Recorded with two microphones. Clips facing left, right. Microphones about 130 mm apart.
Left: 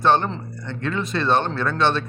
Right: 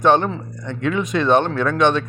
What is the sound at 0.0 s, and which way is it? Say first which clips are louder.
Speech: right 3 dB; 15° right (ahead or behind).